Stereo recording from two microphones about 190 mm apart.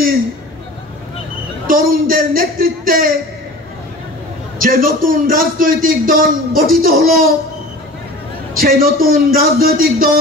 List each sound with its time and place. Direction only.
1.7 s a man's voice: 50° right (ahead or behind)
4.6 s a man's voice: 50° right (ahead or behind)
8.5 s a man's voice: 50° right (ahead or behind)